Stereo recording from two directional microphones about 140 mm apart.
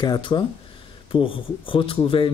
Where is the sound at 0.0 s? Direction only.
35° left (ahead or behind).